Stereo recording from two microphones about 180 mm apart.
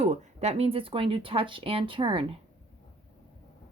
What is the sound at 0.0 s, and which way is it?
Speech, 40° right (ahead or behind).